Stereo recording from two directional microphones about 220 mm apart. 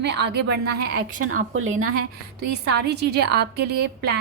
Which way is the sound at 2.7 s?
50° right (ahead or behind).